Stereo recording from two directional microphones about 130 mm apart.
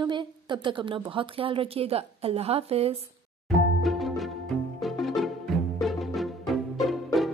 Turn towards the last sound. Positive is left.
turn(degrees=0)  # may be behind; listen again after turning